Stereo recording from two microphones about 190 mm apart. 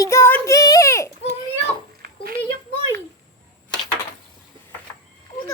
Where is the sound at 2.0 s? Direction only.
50° right (ahead or behind).